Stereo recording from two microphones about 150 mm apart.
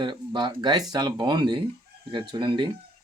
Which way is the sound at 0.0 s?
30° right (ahead or behind).